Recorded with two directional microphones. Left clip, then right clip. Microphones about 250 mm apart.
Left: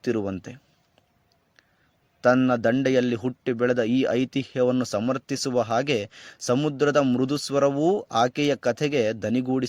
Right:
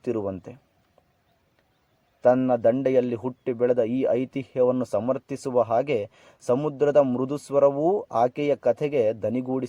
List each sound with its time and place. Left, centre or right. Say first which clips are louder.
0.2 s a man's voice: even; left
2.2 s a man's voice: right 1 dB; left